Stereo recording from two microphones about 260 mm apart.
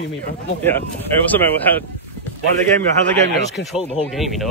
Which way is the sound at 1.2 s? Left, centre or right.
Centre.